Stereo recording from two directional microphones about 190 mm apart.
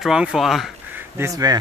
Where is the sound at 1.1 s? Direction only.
15° right (ahead or behind).